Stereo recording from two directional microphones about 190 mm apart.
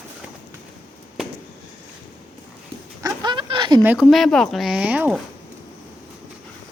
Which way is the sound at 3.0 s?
25° right (ahead or behind).